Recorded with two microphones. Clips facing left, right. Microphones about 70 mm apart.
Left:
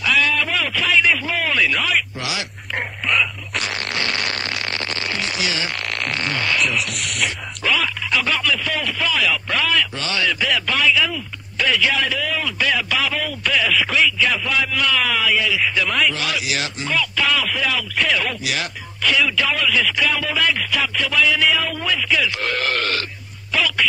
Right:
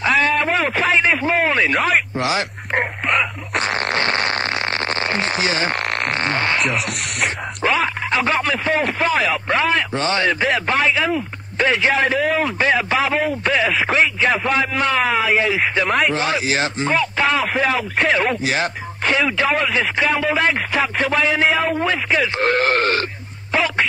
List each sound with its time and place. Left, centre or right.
0.0 s radio: right
1.8 s a sound: right
6.1 s speech: right
23.5 s music: right